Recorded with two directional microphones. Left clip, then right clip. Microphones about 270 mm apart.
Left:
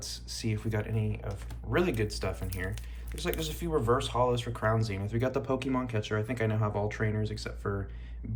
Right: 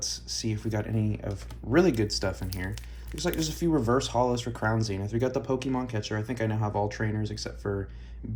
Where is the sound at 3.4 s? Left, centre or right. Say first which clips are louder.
Right 5 dB; centre.